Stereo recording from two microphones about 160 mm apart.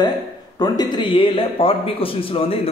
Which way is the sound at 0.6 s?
25° left (ahead or behind).